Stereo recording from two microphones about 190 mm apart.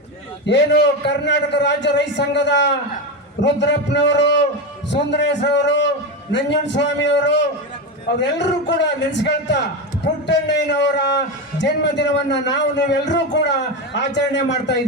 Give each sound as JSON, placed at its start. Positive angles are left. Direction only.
{"t": 0.4, "sound": "a man's voice", "side_deg": 65}